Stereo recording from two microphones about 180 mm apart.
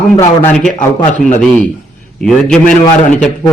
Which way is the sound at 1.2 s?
45° left (ahead or behind).